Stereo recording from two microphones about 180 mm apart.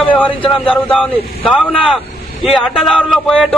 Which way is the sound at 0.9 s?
5° left (ahead or behind).